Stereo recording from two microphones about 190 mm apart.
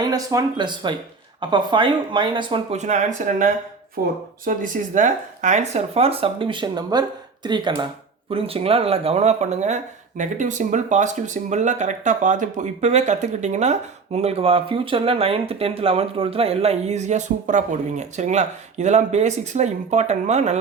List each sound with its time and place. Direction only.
0.0 s speech: 20° right (ahead or behind); by 20.6 s 35° right (ahead or behind)